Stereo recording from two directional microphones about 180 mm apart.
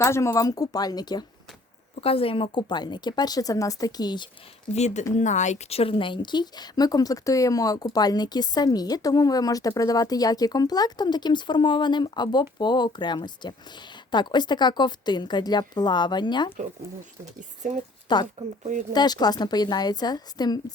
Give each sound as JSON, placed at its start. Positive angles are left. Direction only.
{"t": 0.0, "sound": "speech", "side_deg": 15}
{"t": 4.7, "sound": "speech", "side_deg": 40}
{"t": 17.6, "sound": "speech", "side_deg": -45}
{"t": 18.1, "sound": "speech", "side_deg": 25}